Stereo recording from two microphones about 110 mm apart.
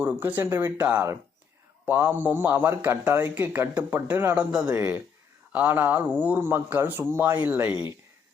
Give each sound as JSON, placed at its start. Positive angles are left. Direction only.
{"t": 0.0, "sound": "speech", "side_deg": -15}